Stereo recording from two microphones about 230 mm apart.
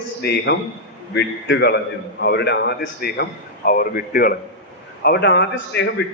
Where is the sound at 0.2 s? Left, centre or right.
Left.